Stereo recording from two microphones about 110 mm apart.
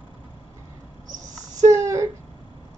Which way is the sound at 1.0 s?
35° right (ahead or behind).